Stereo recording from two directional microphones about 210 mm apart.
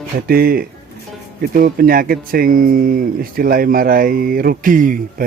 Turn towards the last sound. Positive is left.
turn(degrees=-40)  # may be behind; listen again after turning